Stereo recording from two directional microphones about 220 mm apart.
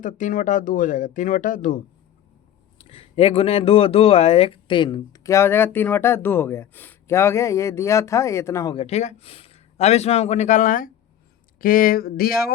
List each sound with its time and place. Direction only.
0.0 s speech: 35° left (ahead or behind)
2.7 s speech: 25° left (ahead or behind)
8.7 s speech: 25° left (ahead or behind); by 12.5 s 45° left (ahead or behind)